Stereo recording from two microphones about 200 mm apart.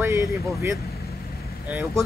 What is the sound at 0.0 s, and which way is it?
Speech, 10° right (ahead or behind).